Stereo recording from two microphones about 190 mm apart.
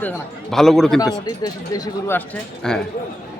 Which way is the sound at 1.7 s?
15° left (ahead or behind).